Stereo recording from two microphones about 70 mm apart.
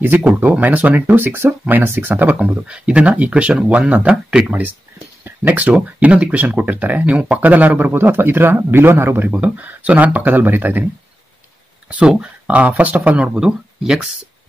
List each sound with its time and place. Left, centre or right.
0.0 s speech: right
2.7 s speech: centre
11.9 s speech: centre
13.3 s speech: centre